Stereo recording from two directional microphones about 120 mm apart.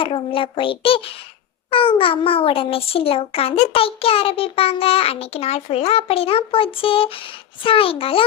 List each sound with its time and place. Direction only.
0.0 s a child's voice: 50° left (ahead or behind)